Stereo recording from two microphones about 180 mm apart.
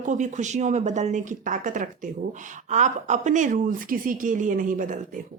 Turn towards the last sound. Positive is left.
turn(degrees=-50)  # may be behind; listen again after turning